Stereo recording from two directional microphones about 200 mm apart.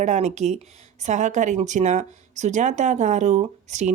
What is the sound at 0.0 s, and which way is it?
Speech, 35° right (ahead or behind).